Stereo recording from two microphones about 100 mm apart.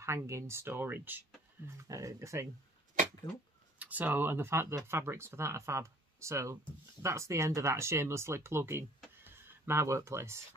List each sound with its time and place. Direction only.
0.0 s speech: 30° right (ahead or behind)
1.8 s speech: 30° right (ahead or behind)
3.8 s speech: 15° right (ahead or behind)